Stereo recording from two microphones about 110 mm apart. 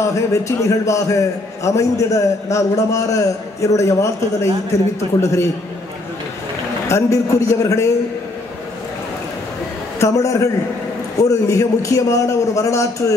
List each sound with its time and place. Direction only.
0.0 s a man's voice: 30° left (ahead or behind)
6.9 s a man's voice: 30° left (ahead or behind)
9.9 s a man's voice: 30° left (ahead or behind)